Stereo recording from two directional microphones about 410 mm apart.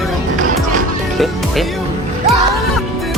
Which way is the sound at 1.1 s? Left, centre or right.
Centre.